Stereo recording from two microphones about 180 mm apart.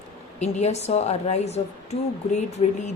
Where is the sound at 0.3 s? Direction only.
40° left (ahead or behind).